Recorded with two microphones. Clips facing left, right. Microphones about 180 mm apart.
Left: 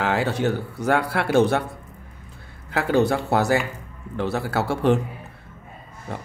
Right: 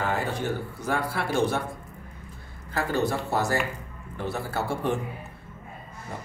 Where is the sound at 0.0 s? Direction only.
90° left; by 1.6 s 70° left (ahead or behind).